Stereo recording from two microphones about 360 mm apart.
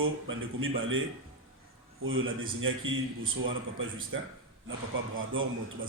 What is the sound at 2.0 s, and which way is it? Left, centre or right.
A man's voice, right.